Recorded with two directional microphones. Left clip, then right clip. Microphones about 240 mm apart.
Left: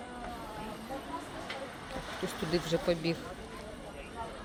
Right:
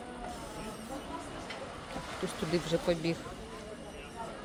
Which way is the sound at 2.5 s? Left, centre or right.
Centre.